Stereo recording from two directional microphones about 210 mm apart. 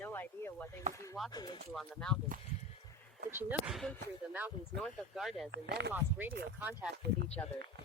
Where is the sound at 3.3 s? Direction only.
10° right (ahead or behind).